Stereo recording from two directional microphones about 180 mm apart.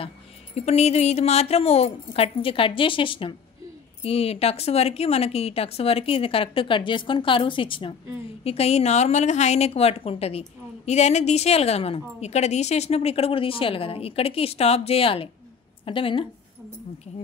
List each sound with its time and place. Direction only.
0.6 s a woman's voice: 35° left (ahead or behind)